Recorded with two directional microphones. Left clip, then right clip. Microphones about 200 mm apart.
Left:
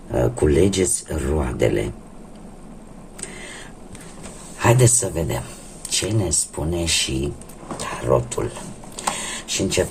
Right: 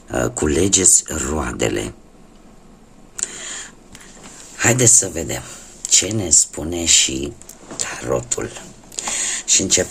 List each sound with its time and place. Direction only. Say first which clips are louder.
0.1 s speech: left 1 dB; 35° right (ahead or behind)
3.2 s a sound: right 6 dB; 35° right (ahead or behind)
4.6 s speech: right 2 dB; 35° right (ahead or behind)
9.5 s speech: right 4 dB; 40° right (ahead or behind)